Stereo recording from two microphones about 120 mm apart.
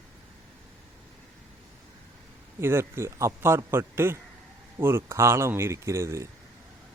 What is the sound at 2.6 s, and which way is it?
Speech, 20° right (ahead or behind).